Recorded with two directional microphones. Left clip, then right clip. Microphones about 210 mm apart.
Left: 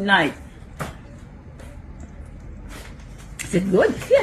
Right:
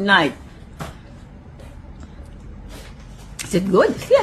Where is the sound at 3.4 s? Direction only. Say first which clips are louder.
Right 2 dB; 20° right (ahead or behind).